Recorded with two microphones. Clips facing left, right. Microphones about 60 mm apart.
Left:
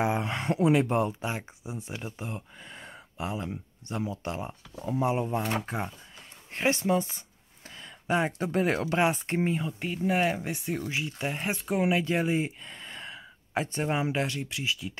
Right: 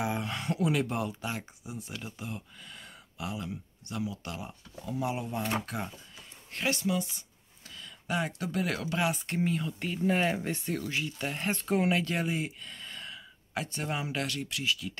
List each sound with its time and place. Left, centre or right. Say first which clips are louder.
0.0 s speech: left 5 dB; left